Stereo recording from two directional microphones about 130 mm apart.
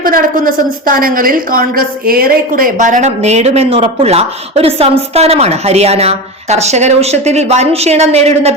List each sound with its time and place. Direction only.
0.0 s a woman's voice: 90° right; by 8.5 s 55° right (ahead or behind)